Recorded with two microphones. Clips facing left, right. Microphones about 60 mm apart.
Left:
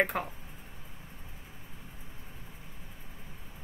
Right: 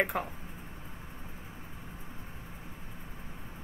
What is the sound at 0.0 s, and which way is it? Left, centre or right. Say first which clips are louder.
Speech: left 1 dB; centre.